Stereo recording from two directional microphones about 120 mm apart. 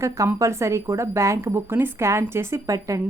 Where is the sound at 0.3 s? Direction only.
25° right (ahead or behind).